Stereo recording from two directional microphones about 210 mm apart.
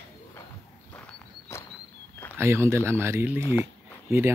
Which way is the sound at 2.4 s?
10° right (ahead or behind).